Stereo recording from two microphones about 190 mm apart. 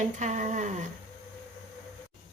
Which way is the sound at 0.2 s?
40° right (ahead or behind).